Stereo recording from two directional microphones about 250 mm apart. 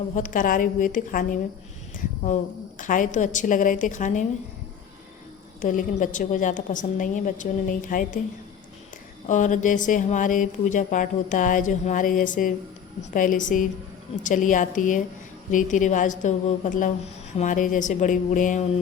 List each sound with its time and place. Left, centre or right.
0.2 s speech: left
5.6 s speech: left
9.2 s speech: left